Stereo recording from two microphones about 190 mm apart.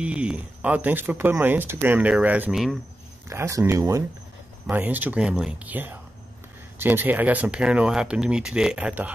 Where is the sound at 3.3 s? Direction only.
15° right (ahead or behind).